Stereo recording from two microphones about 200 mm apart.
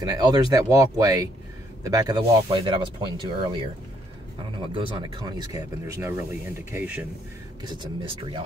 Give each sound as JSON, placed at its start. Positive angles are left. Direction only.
{"t": 0.0, "sound": "speech", "side_deg": -20}
{"t": 7.6, "sound": "speech", "side_deg": -20}